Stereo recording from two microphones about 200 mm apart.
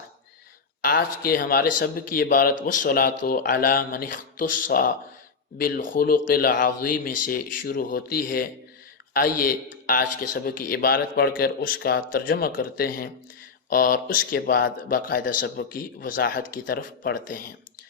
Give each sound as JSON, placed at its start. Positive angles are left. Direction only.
{"t": 1.2, "sound": "a man's voice", "side_deg": 45}